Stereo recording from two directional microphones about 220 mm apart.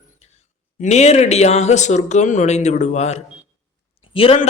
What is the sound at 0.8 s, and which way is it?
A man's voice, 30° left (ahead or behind).